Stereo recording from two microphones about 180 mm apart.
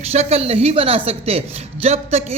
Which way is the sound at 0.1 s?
35° right (ahead or behind).